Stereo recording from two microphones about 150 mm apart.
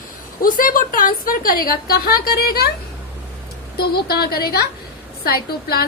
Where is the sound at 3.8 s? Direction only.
90° left.